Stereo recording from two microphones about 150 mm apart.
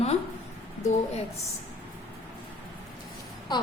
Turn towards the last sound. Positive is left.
turn(degrees=30)  # may be behind; listen again after turning